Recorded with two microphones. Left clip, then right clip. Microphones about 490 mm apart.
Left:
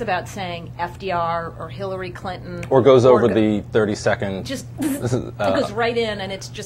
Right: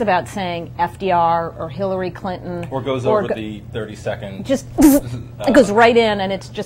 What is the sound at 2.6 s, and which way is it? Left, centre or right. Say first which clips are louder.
Speech: left 10 dB; left.